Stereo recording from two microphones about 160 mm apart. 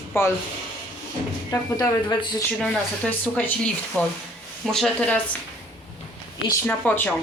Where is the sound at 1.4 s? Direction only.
20° left (ahead or behind).